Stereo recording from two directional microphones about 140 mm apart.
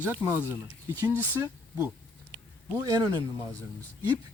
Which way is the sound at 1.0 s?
15° right (ahead or behind).